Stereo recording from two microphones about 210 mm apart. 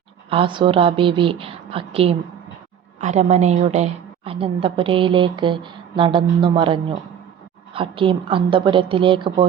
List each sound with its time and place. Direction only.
0.3 s a woman's voice: 25° right (ahead or behind)